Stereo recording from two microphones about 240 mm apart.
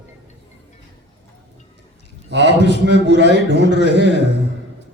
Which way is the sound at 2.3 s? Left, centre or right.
Right.